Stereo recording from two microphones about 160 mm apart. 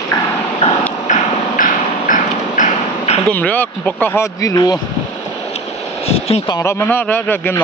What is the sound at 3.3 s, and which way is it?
Speech, 10° left (ahead or behind).